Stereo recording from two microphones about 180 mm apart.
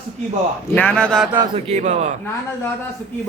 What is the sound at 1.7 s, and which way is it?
Speech, 40° right (ahead or behind).